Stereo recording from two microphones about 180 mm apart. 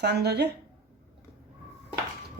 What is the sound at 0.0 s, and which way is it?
Speech, 65° right (ahead or behind).